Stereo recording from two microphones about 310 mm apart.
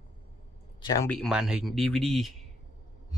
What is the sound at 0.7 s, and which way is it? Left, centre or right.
Speech, centre.